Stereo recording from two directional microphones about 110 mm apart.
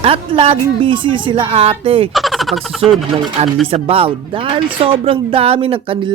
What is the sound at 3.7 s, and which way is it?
Speech, 60° right (ahead or behind).